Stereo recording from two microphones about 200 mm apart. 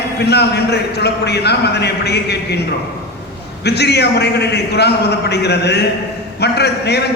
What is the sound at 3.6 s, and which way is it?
A man's voice, 55° left (ahead or behind).